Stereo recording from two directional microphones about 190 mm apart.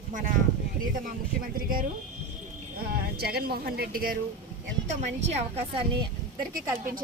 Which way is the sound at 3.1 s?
55° right (ahead or behind).